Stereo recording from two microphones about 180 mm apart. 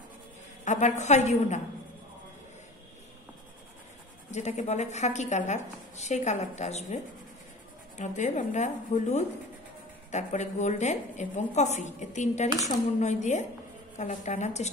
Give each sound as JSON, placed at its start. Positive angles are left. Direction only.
{"t": 0.7, "sound": "a woman's voice", "side_deg": 40}
{"t": 4.3, "sound": "a woman's voice", "side_deg": 40}
{"t": 8.0, "sound": "a woman's voice", "side_deg": 45}